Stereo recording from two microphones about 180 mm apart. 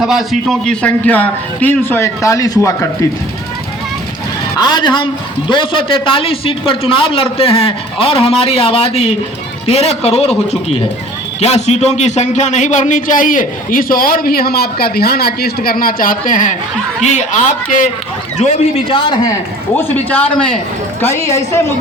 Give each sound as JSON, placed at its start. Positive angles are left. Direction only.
{"t": 0.0, "sound": "a man's voice", "side_deg": 0}
{"t": 4.5, "sound": "a man's voice", "side_deg": 25}
{"t": 11.3, "sound": "a man's voice", "side_deg": 35}
{"t": 19.7, "sound": "a man's voice", "side_deg": 10}